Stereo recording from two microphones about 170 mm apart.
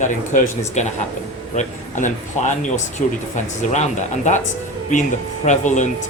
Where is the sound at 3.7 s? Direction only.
45° left (ahead or behind).